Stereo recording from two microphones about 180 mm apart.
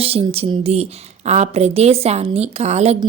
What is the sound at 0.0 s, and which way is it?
Speech, 35° right (ahead or behind).